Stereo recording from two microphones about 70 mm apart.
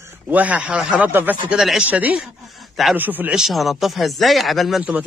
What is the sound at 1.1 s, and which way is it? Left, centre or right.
A man's voice, right.